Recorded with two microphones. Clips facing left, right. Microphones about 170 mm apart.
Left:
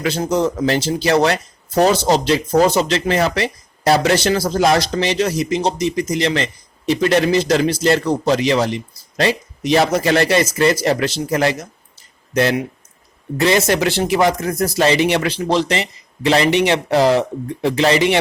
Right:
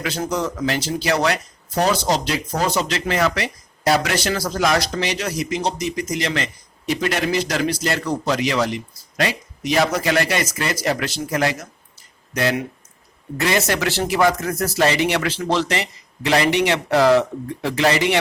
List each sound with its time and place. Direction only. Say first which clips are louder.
0.0 s a man's voice: left 6 dB; 25° left (ahead or behind)